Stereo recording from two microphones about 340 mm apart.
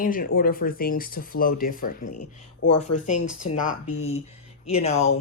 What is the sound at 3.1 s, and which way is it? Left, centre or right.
Speech, left.